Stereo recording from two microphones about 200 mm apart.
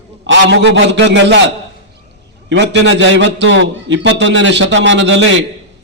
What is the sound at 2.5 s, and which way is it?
Speech, 65° right (ahead or behind).